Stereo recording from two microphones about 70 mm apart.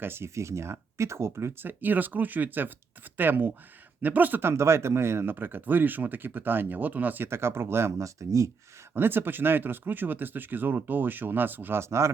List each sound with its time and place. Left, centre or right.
0.0 s speech: right
1.8 s speech: right
9.0 s speech: right